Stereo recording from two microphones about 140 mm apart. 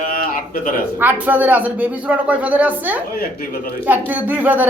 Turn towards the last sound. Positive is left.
turn(degrees=-10)  # may be behind; listen again after turning